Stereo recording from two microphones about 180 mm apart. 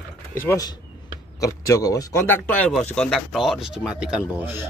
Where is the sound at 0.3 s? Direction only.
15° left (ahead or behind).